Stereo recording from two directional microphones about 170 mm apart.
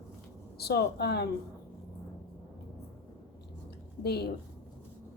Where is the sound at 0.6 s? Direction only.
70° left (ahead or behind).